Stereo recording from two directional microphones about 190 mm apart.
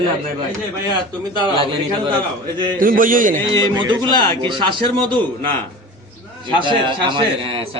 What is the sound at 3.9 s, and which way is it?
Speech, 25° right (ahead or behind).